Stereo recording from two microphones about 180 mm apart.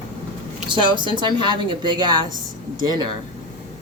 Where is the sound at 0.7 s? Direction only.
25° right (ahead or behind).